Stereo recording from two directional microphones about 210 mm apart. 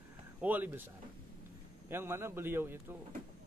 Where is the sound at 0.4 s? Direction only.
10° right (ahead or behind).